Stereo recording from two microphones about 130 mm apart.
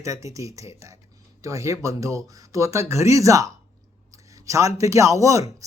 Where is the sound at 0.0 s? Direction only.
25° right (ahead or behind).